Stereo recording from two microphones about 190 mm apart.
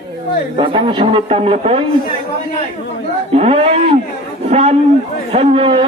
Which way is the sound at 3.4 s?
30° right (ahead or behind).